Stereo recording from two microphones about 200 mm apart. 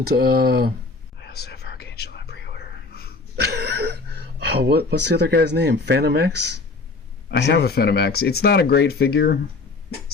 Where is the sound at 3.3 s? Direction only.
55° right (ahead or behind).